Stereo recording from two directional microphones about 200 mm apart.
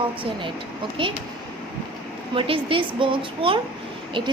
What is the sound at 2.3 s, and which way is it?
A woman's voice, 25° right (ahead or behind).